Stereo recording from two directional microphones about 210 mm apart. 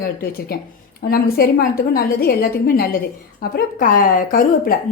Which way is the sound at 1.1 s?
45° left (ahead or behind).